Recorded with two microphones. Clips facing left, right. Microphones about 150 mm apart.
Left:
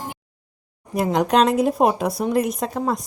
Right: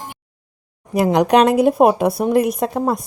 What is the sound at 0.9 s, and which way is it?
A woman's voice, 75° right (ahead or behind).